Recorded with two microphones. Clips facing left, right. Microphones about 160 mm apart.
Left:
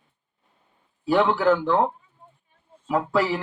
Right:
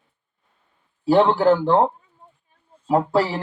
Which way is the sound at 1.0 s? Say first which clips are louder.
Right 4 dB; 35° right (ahead or behind).